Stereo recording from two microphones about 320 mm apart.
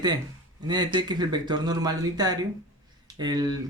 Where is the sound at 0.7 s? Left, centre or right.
Centre.